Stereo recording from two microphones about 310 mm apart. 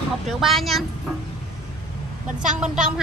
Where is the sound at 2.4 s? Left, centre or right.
Right.